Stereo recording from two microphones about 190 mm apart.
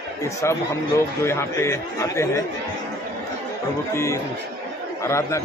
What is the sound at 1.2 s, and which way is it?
Speech, 15° left (ahead or behind).